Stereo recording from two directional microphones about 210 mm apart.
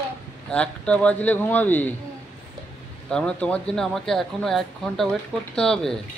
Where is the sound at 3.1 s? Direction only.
5° left (ahead or behind).